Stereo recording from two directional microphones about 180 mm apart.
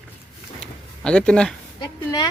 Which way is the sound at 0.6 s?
5° left (ahead or behind).